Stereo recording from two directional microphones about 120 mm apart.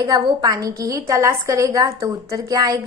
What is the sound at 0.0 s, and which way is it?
A woman's voice, 30° right (ahead or behind).